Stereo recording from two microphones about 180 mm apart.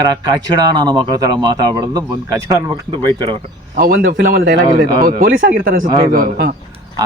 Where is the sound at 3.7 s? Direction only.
55° right (ahead or behind).